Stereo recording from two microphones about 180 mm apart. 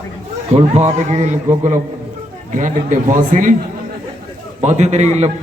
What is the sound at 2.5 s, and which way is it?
A man's voice, 45° right (ahead or behind).